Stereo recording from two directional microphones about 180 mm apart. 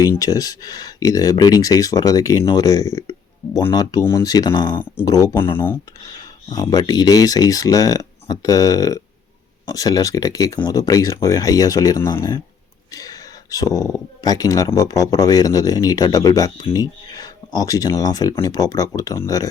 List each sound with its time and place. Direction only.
0.0 s speech: 20° left (ahead or behind)